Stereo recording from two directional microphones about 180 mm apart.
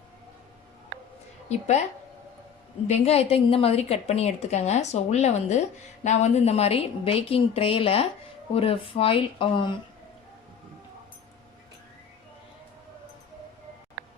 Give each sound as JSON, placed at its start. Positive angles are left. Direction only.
{"t": 1.5, "sound": "a woman's voice", "side_deg": 40}
{"t": 2.8, "sound": "a woman's voice", "side_deg": 35}